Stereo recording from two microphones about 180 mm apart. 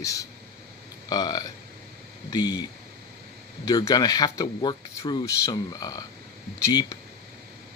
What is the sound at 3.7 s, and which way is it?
Speech, 20° left (ahead or behind).